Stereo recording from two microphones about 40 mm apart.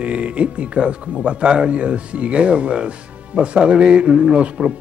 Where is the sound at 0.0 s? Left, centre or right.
Right.